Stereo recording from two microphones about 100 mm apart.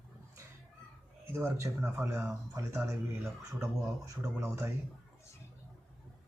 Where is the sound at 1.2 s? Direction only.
25° right (ahead or behind).